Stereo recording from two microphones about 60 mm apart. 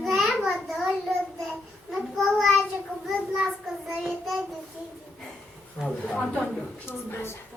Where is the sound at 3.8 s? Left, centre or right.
Centre.